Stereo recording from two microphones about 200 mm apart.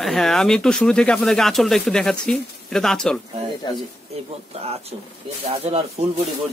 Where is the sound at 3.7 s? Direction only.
20° left (ahead or behind).